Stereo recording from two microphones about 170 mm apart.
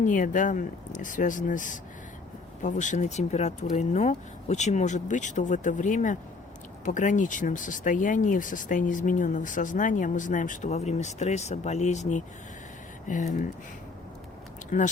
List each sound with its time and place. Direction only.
0.0 s speech: 50° left (ahead or behind)